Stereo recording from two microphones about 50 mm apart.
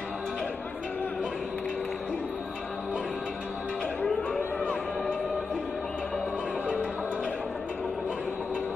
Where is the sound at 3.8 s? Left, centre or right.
Left.